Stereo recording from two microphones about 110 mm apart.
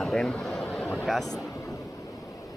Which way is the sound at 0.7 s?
15° left (ahead or behind).